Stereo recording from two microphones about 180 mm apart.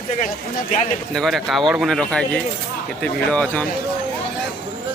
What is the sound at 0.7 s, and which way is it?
Speech, 45° left (ahead or behind).